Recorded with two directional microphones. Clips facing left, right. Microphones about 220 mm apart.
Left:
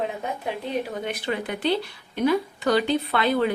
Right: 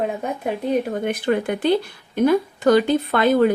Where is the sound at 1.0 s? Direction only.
50° right (ahead or behind).